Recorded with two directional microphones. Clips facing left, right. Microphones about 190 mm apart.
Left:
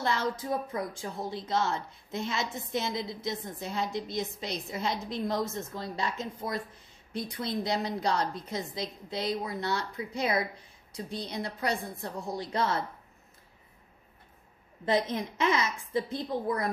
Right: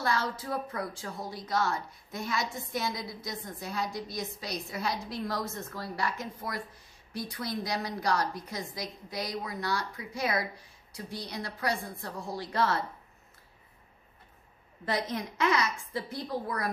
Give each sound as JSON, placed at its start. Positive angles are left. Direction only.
{"t": 0.0, "sound": "speech", "side_deg": 20}
{"t": 14.9, "sound": "speech", "side_deg": 20}